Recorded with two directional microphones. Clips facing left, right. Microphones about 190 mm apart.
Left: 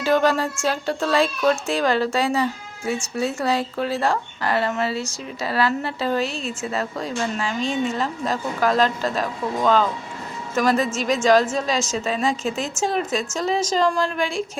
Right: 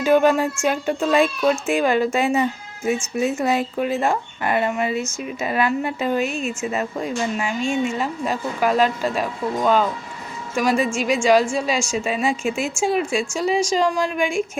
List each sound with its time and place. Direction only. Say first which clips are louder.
0.0 s speech: right 3 dB; 15° right (ahead or behind)